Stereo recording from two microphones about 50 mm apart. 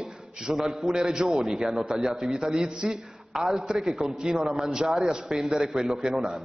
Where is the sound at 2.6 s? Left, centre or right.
Centre.